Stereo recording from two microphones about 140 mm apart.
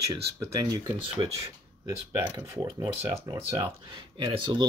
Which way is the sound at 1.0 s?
40° right (ahead or behind).